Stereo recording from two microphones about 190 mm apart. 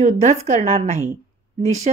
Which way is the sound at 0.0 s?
35° right (ahead or behind).